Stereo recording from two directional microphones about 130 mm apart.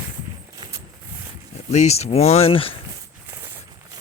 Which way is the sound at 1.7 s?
55° left (ahead or behind).